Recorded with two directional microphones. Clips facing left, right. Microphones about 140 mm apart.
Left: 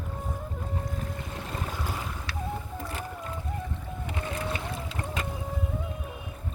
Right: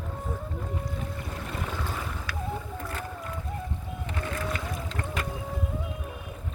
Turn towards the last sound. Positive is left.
turn(degrees=20)  # may be behind; listen again after turning